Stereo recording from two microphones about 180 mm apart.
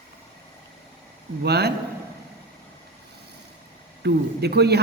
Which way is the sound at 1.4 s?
65° right (ahead or behind).